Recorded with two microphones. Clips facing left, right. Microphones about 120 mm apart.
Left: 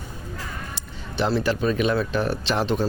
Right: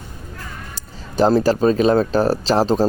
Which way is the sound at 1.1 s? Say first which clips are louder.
Right 8 dB; 40° right (ahead or behind).